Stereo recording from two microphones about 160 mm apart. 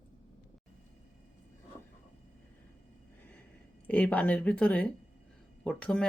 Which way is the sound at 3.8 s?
10° left (ahead or behind).